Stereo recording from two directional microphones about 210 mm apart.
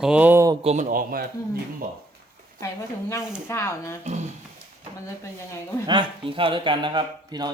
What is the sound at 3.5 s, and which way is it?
Speech, 10° left (ahead or behind).